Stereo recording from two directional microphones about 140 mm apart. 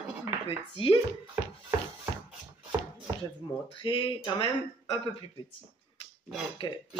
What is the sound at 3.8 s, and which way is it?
Speech, 40° left (ahead or behind).